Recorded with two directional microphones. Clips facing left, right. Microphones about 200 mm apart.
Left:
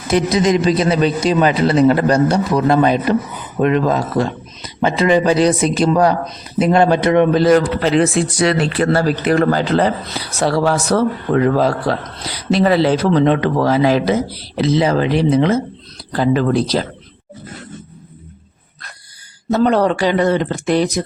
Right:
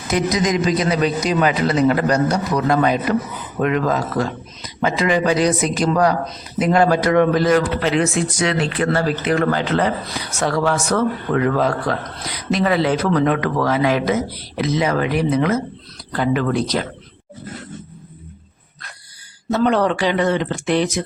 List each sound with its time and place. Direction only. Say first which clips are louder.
0.1 s a man's voice: left 4 dB; 30° left (ahead or behind)
7.4 s speech: left 4 dB; 35° left (ahead or behind)
19.5 s speech: left 3 dB; 35° left (ahead or behind)